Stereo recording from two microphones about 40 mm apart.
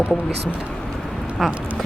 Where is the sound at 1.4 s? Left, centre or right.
Centre.